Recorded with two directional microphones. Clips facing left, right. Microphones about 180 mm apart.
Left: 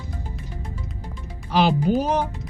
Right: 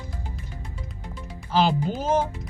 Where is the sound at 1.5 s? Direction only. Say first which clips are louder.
Left 4 dB; 15° left (ahead or behind).